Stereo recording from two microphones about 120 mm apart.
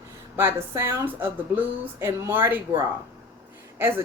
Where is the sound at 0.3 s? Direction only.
20° right (ahead or behind).